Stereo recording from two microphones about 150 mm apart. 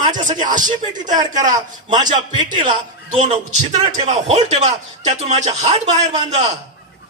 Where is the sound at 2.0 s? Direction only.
30° right (ahead or behind).